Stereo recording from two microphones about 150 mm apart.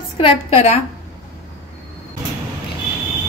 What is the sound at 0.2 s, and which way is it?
Speech, 45° left (ahead or behind).